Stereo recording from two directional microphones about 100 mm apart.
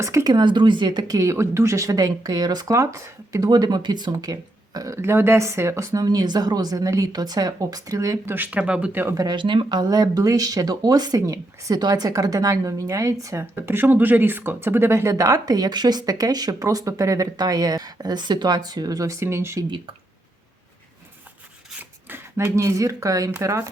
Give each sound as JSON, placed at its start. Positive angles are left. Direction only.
{"t": 0.0, "sound": "speech", "side_deg": -30}
{"t": 0.3, "sound": "speech", "side_deg": -50}
{"t": 2.6, "sound": "speech", "side_deg": -30}
{"t": 3.5, "sound": "speech", "side_deg": -45}
{"t": 4.9, "sound": "speech", "side_deg": -25}
{"t": 8.3, "sound": "speech", "side_deg": -15}
{"t": 9.1, "sound": "speech", "side_deg": -45}
{"t": 13.4, "sound": "speech", "side_deg": -25}
{"t": 22.1, "sound": "speech", "side_deg": -25}